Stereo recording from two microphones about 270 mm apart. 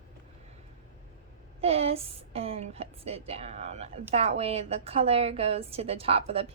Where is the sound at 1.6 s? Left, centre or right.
Right.